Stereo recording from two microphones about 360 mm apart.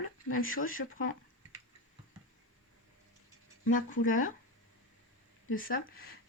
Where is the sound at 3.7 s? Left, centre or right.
Left.